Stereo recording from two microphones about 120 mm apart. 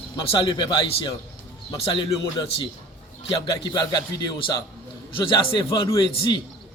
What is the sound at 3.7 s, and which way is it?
Speech, 35° left (ahead or behind).